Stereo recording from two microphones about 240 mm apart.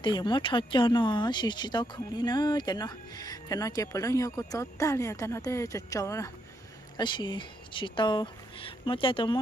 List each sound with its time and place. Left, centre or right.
0.0 s speech: centre